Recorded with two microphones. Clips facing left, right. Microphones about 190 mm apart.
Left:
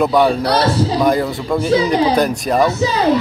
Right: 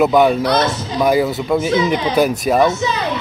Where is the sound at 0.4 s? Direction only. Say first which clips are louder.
Left 2 dB; 35° left (ahead or behind).